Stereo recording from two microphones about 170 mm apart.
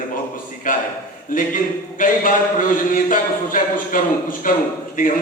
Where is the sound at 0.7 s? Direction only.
55° left (ahead or behind).